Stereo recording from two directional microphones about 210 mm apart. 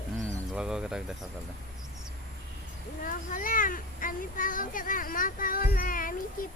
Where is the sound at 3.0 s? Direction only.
40° left (ahead or behind).